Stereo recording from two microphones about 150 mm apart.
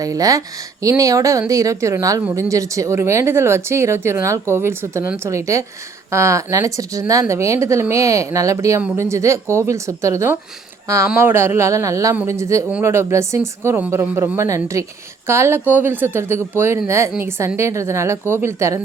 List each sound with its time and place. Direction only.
0.0 s speech: 25° right (ahead or behind)